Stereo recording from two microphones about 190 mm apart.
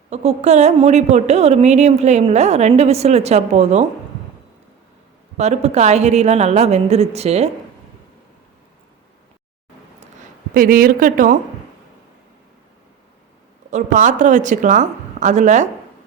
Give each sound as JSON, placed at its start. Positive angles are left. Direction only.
{"t": 0.1, "sound": "a woman's voice", "side_deg": -35}
{"t": 5.4, "sound": "a woman's voice", "side_deg": -35}
{"t": 10.5, "sound": "speech", "side_deg": -50}
{"t": 13.7, "sound": "a woman's voice", "side_deg": -40}